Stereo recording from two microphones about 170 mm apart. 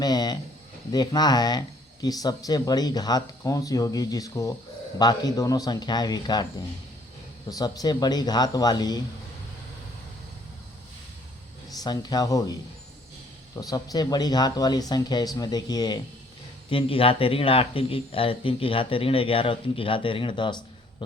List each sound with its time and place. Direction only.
0.0 s speech: 25° left (ahead or behind)
7.5 s speech: 20° left (ahead or behind)
11.8 s speech: 25° left (ahead or behind)
13.6 s speech: 20° left (ahead or behind)